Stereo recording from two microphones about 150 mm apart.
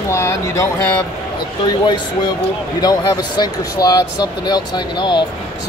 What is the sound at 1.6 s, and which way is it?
Speech, 30° left (ahead or behind).